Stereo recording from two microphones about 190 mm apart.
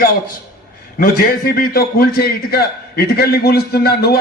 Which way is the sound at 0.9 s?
50° left (ahead or behind).